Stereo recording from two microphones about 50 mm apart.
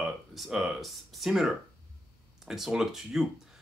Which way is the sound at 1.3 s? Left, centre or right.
Centre.